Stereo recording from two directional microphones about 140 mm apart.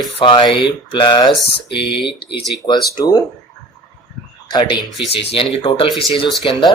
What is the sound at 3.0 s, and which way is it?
Speech, 25° left (ahead or behind).